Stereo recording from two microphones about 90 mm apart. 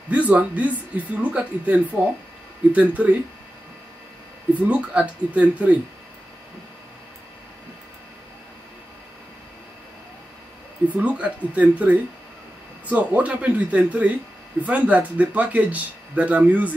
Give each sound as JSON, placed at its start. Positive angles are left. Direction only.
{"t": 0.1, "sound": "speech", "side_deg": -15}
{"t": 4.6, "sound": "speech", "side_deg": -15}
{"t": 10.9, "sound": "speech", "side_deg": -15}